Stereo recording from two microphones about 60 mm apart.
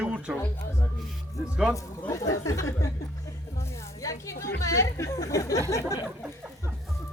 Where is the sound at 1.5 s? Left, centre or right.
Centre.